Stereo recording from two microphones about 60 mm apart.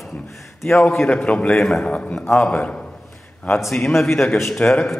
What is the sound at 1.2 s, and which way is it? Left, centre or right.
Speech, centre.